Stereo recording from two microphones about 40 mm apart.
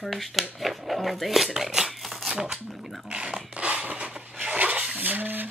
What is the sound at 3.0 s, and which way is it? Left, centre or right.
Speech, right.